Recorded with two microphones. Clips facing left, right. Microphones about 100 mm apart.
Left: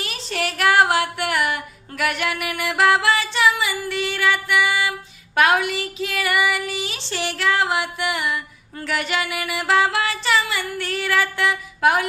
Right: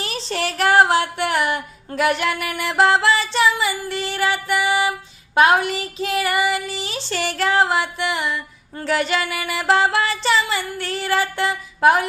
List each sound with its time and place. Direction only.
0.0 s female singing: 30° right (ahead or behind)
2.0 s music: 30° right (ahead or behind)